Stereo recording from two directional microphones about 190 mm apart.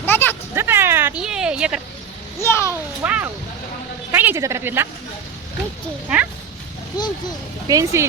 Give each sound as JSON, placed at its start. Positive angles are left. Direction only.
{"t": 0.0, "sound": "a sound", "side_deg": 10}
{"t": 0.5, "sound": "a sound", "side_deg": -10}
{"t": 2.4, "sound": "a child's voice", "side_deg": 15}
{"t": 3.0, "sound": "a woman's voice", "side_deg": -10}
{"t": 6.9, "sound": "a child's voice", "side_deg": 20}
{"t": 7.7, "sound": "a woman's voice", "side_deg": -15}